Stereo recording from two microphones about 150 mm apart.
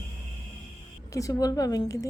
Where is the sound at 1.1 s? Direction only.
20° left (ahead or behind).